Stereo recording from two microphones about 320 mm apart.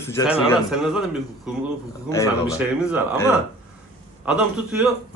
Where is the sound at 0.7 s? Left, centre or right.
Centre.